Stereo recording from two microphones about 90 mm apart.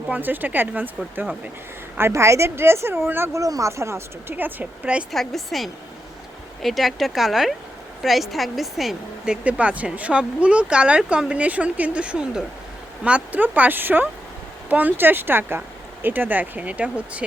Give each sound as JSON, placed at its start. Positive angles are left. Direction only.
{"t": 0.1, "sound": "speech", "side_deg": -20}
{"t": 3.4, "sound": "speech", "side_deg": -40}
{"t": 5.1, "sound": "speech", "side_deg": 5}